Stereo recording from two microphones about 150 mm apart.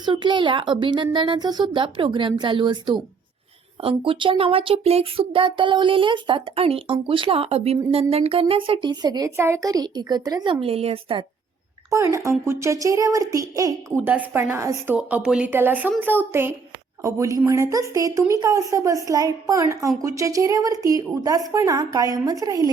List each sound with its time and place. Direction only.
0.0 s speech: 30° right (ahead or behind)
11.9 s a child's voice: 20° right (ahead or behind)
14.9 s a child's voice: 5° right (ahead or behind); by 22.7 s 25° right (ahead or behind)